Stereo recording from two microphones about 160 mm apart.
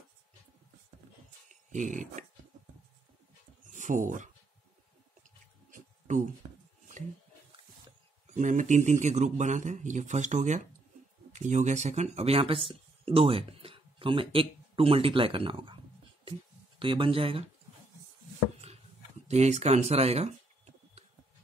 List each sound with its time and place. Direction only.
1.5 s speech: 50° right (ahead or behind)
3.7 s speech: 50° right (ahead or behind)
5.7 s a sound: 50° right (ahead or behind)
8.3 s a man's voice: 50° right (ahead or behind); by 17.5 s 35° right (ahead or behind)
19.2 s speech: 45° right (ahead or behind)